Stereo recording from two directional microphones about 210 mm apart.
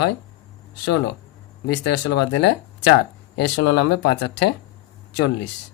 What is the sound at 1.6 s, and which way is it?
Speech, 55° left (ahead or behind).